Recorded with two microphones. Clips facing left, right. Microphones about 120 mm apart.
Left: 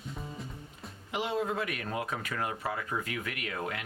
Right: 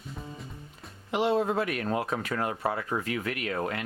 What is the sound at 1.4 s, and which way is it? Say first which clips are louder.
Speech: right 5 dB; 35° right (ahead or behind).